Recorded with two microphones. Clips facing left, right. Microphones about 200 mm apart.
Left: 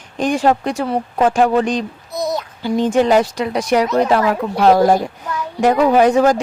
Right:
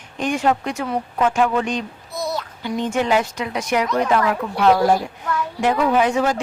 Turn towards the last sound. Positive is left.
turn(degrees=40)  # may be behind; listen again after turning